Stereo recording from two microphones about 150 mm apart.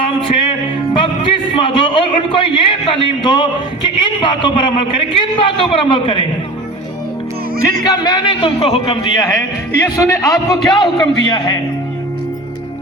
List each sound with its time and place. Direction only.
0.2 s music: 35° left (ahead or behind)
0.9 s a man's voice: 35° left (ahead or behind)
7.9 s a man's voice: 30° left (ahead or behind)